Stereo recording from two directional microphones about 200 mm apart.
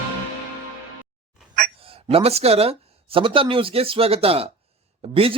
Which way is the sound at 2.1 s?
30° right (ahead or behind).